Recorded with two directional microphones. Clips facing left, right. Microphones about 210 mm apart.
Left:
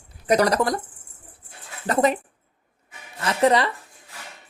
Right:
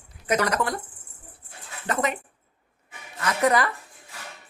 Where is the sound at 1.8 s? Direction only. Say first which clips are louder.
Left 6 dB; 35° left (ahead or behind).